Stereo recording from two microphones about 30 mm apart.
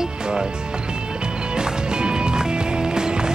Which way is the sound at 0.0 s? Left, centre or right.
Right.